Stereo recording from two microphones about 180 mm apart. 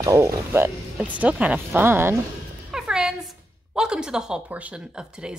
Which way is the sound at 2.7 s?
5° right (ahead or behind).